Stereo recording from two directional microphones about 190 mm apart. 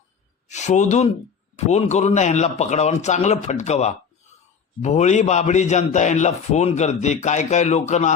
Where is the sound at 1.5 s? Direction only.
35° left (ahead or behind).